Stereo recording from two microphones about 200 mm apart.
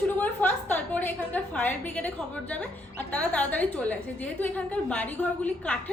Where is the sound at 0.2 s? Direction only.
10° left (ahead or behind).